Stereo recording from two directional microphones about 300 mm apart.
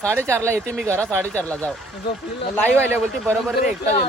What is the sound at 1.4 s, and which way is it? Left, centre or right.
Speech, centre.